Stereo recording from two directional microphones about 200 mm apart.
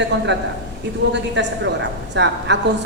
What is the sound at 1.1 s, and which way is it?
A woman's voice, 60° right (ahead or behind).